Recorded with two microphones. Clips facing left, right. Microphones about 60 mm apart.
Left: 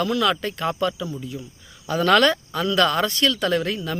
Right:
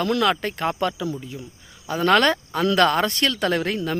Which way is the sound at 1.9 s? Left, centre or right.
Right.